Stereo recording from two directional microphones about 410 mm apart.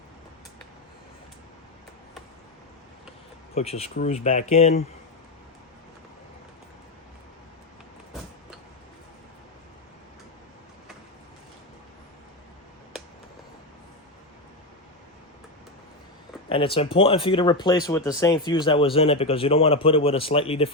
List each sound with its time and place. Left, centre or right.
3.5 s speech: centre
16.5 s speech: centre